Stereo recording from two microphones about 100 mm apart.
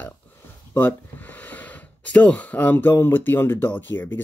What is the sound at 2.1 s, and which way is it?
Speech, 15° left (ahead or behind).